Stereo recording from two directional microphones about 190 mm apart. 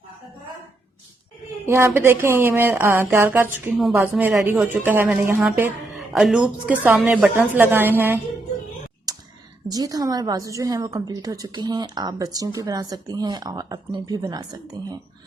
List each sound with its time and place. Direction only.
1.6 s a woman's voice: 15° right (ahead or behind)
3.7 s a woman's voice: centre (ahead or behind)
9.1 s a sound: 20° right (ahead or behind)
9.6 s a woman's voice: 20° right (ahead or behind)